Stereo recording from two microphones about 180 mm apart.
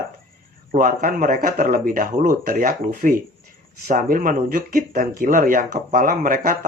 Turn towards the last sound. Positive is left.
turn(degrees=-50)  # may be behind; listen again after turning